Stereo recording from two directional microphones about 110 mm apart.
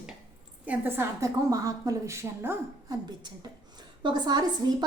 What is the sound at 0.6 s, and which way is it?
Speech, 15° right (ahead or behind).